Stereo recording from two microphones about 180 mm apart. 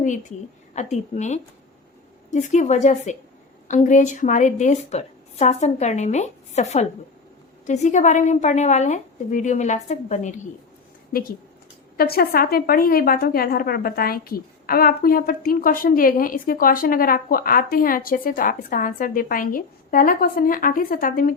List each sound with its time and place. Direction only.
0.0 s a woman's voice: 45° left (ahead or behind)
11.1 s a woman's voice: 55° left (ahead or behind)